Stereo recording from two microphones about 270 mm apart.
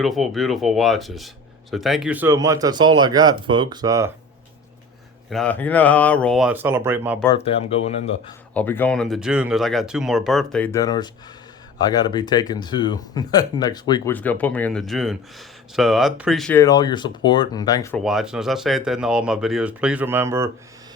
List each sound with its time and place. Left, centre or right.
0.0 s speech: centre
5.3 s speech: centre
7.3 s speech: left
8.5 s speech: centre
17.9 s speech: centre